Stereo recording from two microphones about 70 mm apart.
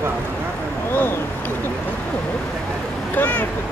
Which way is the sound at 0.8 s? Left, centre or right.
Left.